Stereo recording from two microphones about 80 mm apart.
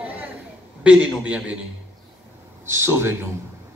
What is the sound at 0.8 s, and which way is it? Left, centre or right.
Speech, centre.